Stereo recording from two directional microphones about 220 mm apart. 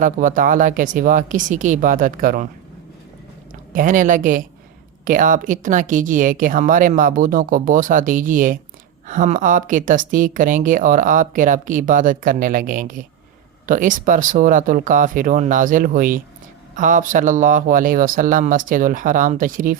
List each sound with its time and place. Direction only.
0.0 s a woman's voice: 35° right (ahead or behind)
3.7 s a woman's voice: 35° right (ahead or behind)